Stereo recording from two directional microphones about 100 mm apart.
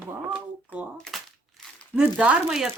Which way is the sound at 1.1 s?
Centre (ahead or behind).